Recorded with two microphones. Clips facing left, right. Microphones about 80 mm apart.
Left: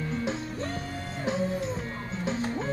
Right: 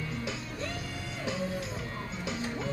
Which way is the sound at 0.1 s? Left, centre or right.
Left.